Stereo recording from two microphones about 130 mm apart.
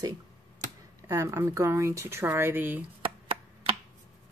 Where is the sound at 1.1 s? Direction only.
25° right (ahead or behind).